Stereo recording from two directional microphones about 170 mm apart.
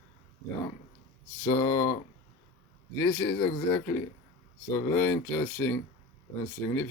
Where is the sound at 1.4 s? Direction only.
15° left (ahead or behind).